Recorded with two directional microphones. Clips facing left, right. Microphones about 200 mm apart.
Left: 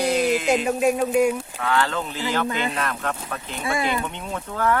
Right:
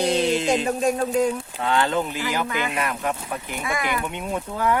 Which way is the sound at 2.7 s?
10° right (ahead or behind).